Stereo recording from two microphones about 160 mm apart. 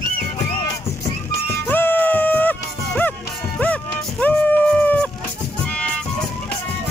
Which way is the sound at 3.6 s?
10° left (ahead or behind).